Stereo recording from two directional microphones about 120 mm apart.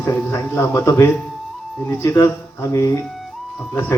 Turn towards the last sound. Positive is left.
turn(degrees=20)  # may be behind; listen again after turning